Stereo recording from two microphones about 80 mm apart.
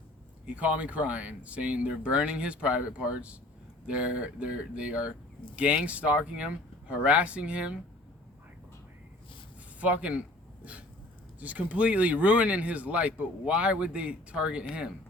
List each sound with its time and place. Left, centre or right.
0.5 s speech: centre
9.8 s speech: centre